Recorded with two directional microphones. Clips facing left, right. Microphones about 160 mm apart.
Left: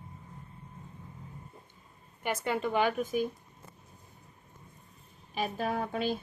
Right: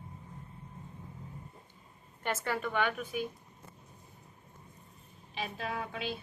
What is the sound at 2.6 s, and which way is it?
Speech, 30° left (ahead or behind).